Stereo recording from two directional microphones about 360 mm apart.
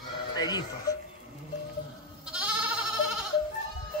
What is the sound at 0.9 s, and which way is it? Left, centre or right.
Goat, centre.